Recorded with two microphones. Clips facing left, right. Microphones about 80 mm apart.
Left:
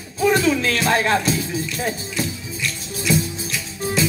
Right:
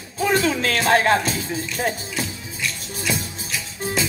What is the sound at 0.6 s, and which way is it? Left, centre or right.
Speech, right.